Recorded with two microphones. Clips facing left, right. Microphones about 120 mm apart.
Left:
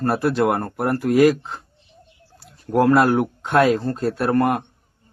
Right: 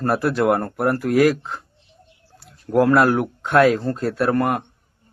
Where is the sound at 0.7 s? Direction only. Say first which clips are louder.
Even; 20° left (ahead or behind).